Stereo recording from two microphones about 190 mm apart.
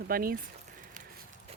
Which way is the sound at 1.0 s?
45° right (ahead or behind).